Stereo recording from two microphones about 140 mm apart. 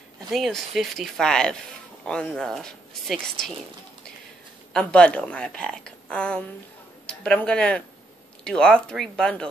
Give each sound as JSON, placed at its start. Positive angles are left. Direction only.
{"t": 0.3, "sound": "speech", "side_deg": 0}
{"t": 4.7, "sound": "a woman's voice", "side_deg": 10}